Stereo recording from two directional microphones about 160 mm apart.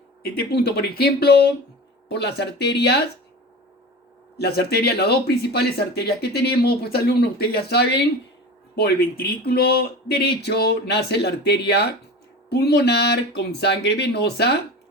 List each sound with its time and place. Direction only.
0.3 s speech: 85° left
2.0 s speech: 90° left
4.4 s speech: 85° left
8.7 s speech: 80° left